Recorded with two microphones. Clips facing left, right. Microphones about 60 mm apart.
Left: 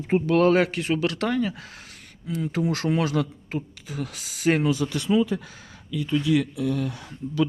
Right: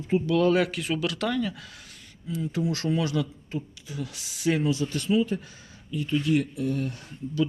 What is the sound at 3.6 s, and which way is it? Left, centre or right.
Speech, left.